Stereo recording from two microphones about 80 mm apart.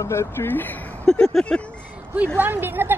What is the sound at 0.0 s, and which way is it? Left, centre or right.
Speech, left.